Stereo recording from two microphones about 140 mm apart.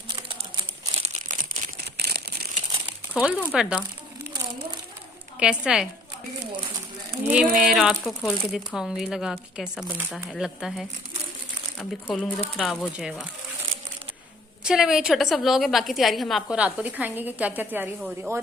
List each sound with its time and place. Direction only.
0.9 s crumpling: 50° right (ahead or behind)
1.4 s a sound: 80° right
3.2 s speech: 5° right (ahead or behind)
5.4 s speech: 5° right (ahead or behind)
7.3 s a woman's voice: 5° right (ahead or behind)
12.0 s a woman's voice: 5° left (ahead or behind)
14.6 s a woman's voice: 5° right (ahead or behind)